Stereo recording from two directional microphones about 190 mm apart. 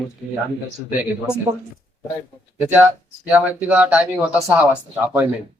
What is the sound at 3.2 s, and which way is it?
A man's voice, 10° right (ahead or behind).